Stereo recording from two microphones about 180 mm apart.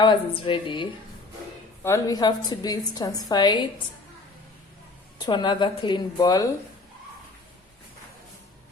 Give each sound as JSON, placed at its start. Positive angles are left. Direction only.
{"t": 0.0, "sound": "a woman's voice", "side_deg": 30}
{"t": 1.8, "sound": "a woman's voice", "side_deg": 15}
{"t": 5.2, "sound": "a woman's voice", "side_deg": 25}